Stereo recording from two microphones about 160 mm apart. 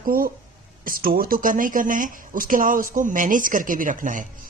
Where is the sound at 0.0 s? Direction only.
65° right (ahead or behind).